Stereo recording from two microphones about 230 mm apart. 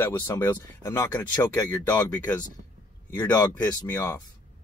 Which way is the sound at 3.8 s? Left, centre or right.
Centre.